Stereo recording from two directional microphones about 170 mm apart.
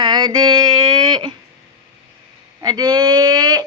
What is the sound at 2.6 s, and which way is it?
Speech, 25° right (ahead or behind).